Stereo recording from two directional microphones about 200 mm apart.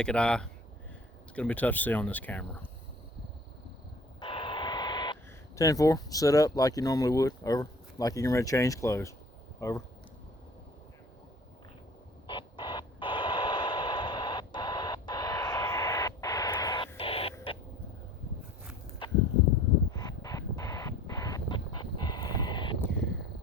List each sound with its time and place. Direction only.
0.0 s speech: 5° left (ahead or behind)
4.2 s vehicle: 25° left (ahead or behind)
5.5 s speech: 15° left (ahead or behind)
12.3 s a sound: 25° left (ahead or behind)
19.0 s a sound: 25° left (ahead or behind)
19.9 s vehicle: 20° left (ahead or behind)